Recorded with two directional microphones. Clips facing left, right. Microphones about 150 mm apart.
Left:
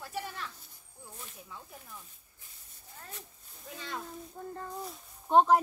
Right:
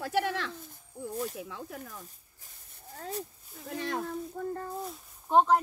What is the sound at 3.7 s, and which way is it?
Speech, 65° right (ahead or behind).